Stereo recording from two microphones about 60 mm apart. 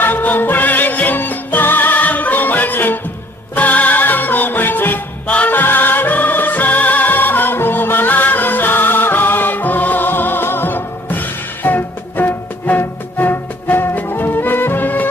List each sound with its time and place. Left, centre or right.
0.0 s music: left
5.2 s music: left